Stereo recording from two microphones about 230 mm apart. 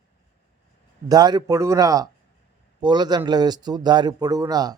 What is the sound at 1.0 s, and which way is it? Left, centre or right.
Speech, centre.